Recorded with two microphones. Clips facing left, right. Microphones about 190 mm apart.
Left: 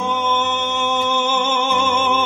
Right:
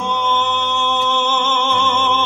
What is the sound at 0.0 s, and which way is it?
Music, 5° left (ahead or behind).